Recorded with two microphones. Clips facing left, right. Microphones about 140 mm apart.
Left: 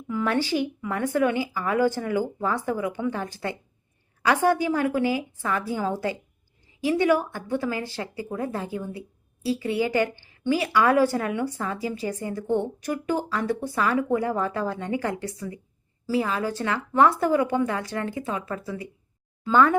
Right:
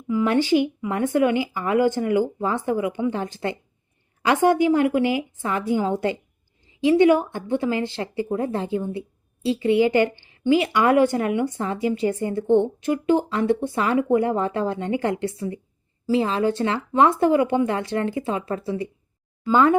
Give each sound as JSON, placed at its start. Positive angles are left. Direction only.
{"t": 0.1, "sound": "a woman's voice", "side_deg": -15}